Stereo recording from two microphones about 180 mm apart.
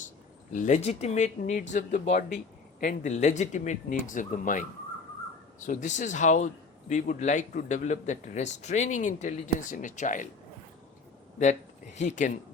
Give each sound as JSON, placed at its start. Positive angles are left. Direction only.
{"t": 0.5, "sound": "a man's voice", "side_deg": 45}
{"t": 5.6, "sound": "a man's voice", "side_deg": 45}
{"t": 11.9, "sound": "speech", "side_deg": 45}